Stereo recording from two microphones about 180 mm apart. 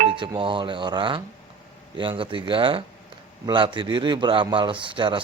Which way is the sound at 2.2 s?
30° right (ahead or behind).